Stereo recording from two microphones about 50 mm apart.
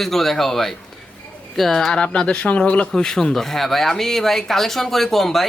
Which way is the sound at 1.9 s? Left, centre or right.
Centre.